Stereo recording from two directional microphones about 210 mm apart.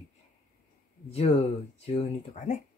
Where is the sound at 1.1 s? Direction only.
30° left (ahead or behind).